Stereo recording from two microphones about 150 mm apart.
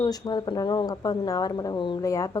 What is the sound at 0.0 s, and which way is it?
Speech, 25° left (ahead or behind).